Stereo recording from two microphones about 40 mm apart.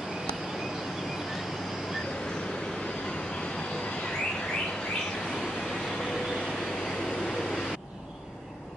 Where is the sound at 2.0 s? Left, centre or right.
Centre.